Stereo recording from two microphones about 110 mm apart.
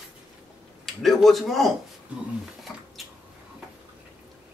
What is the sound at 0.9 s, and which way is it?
Speech, centre (ahead or behind).